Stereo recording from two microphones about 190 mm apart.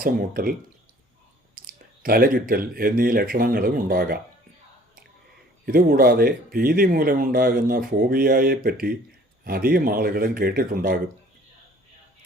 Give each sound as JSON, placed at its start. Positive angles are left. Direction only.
{"t": 0.0, "sound": "speech", "side_deg": -50}
{"t": 1.6, "sound": "clicking", "side_deg": -45}
{"t": 2.0, "sound": "speech", "side_deg": -50}
{"t": 5.6, "sound": "speech", "side_deg": -50}